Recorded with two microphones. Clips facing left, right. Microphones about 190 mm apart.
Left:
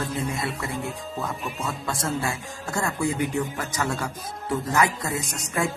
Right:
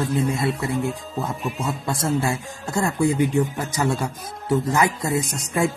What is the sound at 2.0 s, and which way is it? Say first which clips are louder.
Speech: right 6 dB; 25° right (ahead or behind).